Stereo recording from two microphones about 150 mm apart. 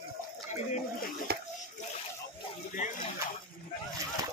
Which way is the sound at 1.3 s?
90° right.